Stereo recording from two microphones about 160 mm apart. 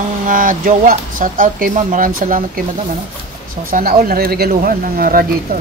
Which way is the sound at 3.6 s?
65° right (ahead or behind).